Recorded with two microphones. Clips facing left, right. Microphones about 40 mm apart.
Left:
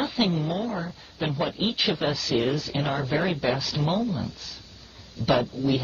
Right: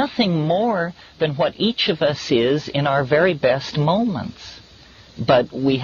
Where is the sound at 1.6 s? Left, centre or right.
Right.